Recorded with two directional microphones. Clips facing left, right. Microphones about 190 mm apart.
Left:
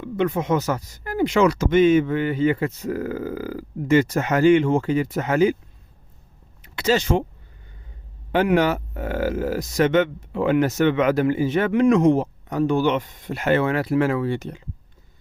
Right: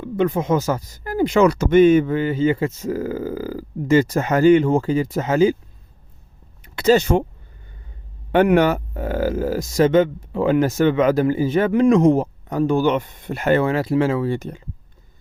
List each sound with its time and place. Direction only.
0.0 s speech: 35° right (ahead or behind)
6.9 s speech: 45° right (ahead or behind)
8.3 s speech: 55° right (ahead or behind)
8.7 s speech: 35° right (ahead or behind)